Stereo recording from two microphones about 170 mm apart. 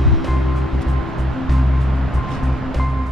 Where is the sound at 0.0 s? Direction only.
Centre (ahead or behind).